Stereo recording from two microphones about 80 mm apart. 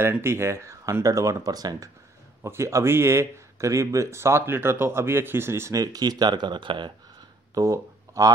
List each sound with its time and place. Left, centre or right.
0.0 s speech: right
2.4 s speech: right
5.8 s speech: right
7.5 s speech: right